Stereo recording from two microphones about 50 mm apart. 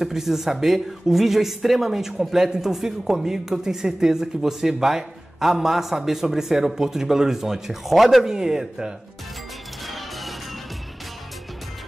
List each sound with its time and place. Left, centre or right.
0.0 s speech: centre
9.8 s music: centre